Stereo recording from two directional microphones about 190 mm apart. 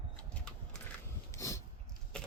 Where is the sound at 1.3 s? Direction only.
15° left (ahead or behind).